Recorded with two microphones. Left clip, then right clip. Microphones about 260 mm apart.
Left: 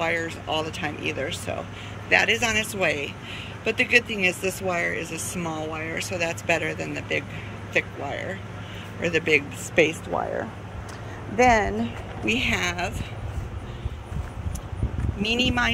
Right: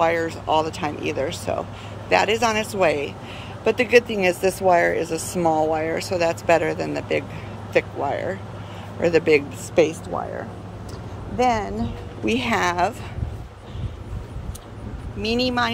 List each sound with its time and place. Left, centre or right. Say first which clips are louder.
0.5 s speech: right 7 dB; centre
5.4 s speech: right 13 dB; right
5.8 s speech: right 6 dB; centre
11.3 s speech: left 2 dB; centre
15.2 s speech: right 1 dB; centre